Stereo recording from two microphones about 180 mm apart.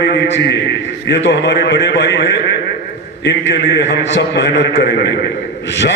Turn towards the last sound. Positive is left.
turn(degrees=60)  # may be behind; listen again after turning